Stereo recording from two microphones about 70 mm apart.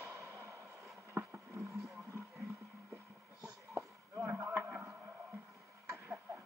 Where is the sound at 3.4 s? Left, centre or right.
Right.